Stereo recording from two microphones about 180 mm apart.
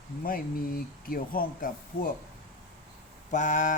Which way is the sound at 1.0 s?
55° left (ahead or behind).